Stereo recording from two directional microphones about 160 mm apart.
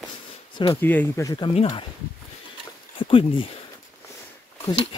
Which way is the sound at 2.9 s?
35° left (ahead or behind).